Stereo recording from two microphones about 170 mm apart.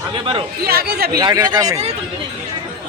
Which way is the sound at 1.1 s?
25° right (ahead or behind).